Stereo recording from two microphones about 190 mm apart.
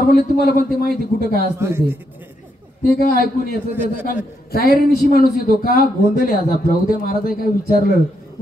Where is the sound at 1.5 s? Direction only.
15° right (ahead or behind).